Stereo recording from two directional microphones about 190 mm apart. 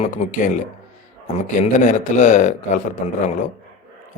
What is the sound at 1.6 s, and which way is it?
A man's voice, 40° left (ahead or behind).